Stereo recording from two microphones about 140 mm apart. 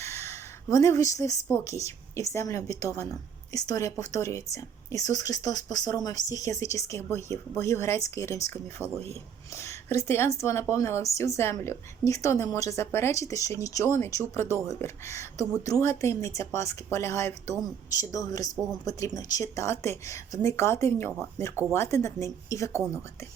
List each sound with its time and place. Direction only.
0.0 s speech: 20° left (ahead or behind)
8.8 s speech: 15° right (ahead or behind)
9.6 s speech: 20° left (ahead or behind)